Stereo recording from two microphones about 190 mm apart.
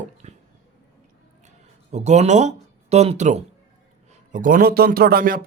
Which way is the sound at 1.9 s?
35° right (ahead or behind).